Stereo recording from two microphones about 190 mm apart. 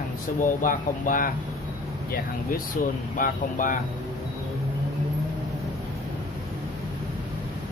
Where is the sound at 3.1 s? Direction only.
45° left (ahead or behind).